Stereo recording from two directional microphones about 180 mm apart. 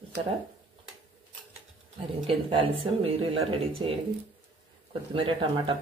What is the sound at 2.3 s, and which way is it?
Speech, 30° right (ahead or behind).